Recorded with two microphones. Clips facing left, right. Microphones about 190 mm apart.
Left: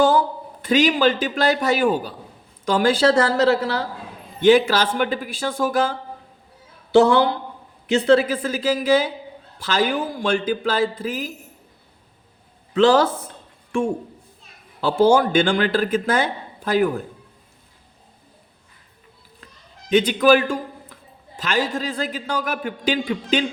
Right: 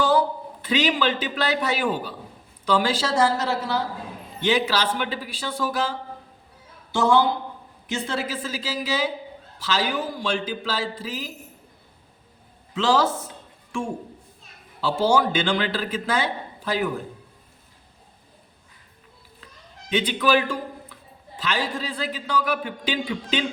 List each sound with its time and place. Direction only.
0.0 s a man's voice: 45° left (ahead or behind); by 3.8 s 65° left (ahead or behind)
4.4 s speech: 50° left (ahead or behind)
6.9 s a woman's voice: 65° left (ahead or behind)
12.7 s a woman's voice: 60° left (ahead or behind)
14.8 s speech: 55° left (ahead or behind)
19.9 s speech: 45° left (ahead or behind)